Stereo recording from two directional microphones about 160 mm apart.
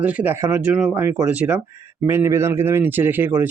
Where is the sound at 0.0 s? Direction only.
10° right (ahead or behind).